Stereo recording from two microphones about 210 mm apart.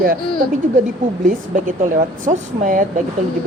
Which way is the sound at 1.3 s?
40° right (ahead or behind).